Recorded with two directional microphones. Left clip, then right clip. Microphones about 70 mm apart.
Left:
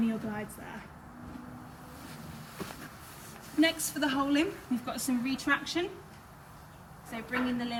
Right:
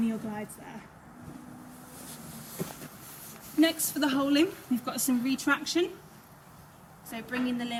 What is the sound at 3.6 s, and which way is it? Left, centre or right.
Speech, centre.